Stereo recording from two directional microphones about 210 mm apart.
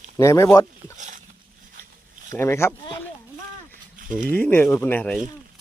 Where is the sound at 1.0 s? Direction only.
35° right (ahead or behind).